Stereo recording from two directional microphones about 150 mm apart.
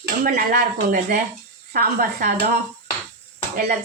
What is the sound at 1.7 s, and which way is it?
Speech, 80° right.